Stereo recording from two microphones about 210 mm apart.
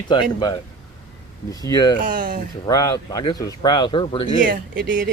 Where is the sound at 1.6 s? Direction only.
20° left (ahead or behind).